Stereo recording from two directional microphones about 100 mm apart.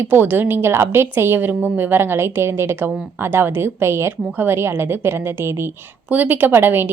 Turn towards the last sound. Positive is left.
turn(degrees=-20)  # may be behind; listen again after turning